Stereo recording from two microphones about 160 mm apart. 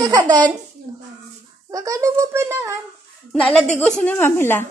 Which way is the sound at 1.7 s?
20° right (ahead or behind).